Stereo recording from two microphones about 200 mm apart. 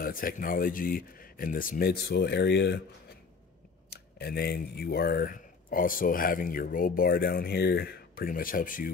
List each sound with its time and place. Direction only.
0.0 s speech: 45° left (ahead or behind)
3.9 s speech: 50° left (ahead or behind)